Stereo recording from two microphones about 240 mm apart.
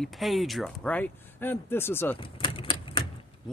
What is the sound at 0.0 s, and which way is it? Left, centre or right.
Speech, centre.